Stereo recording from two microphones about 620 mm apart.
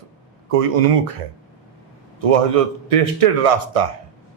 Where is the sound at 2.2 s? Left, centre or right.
Right.